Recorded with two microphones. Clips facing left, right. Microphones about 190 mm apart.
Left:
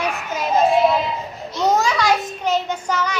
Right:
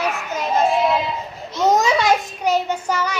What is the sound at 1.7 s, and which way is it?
Speech, 20° right (ahead or behind).